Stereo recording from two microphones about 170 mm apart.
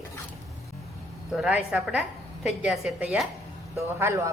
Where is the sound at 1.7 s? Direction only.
5° right (ahead or behind).